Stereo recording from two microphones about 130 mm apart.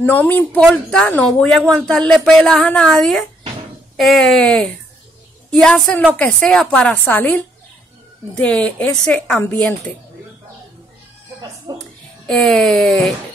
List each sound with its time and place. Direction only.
0.0 s a woman's voice: 15° left (ahead or behind)
11.7 s a sound: 30° right (ahead or behind)
12.3 s speech: 5° left (ahead or behind)